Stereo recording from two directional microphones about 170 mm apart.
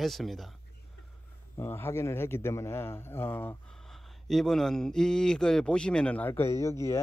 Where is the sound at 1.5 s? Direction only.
15° left (ahead or behind).